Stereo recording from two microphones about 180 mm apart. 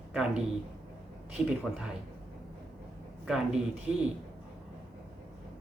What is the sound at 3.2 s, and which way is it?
Speech, 5° right (ahead or behind).